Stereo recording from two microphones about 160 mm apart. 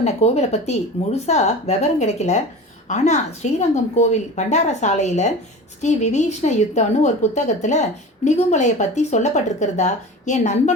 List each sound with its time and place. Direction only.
0.0 s a woman's voice: 45° left (ahead or behind)